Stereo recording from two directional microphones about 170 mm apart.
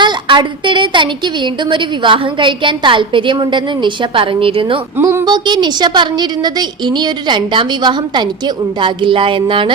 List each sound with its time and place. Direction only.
0.0 s a woman's voice: 30° right (ahead or behind)
4.9 s speech: 15° right (ahead or behind)
5.2 s a woman's voice: 25° right (ahead or behind)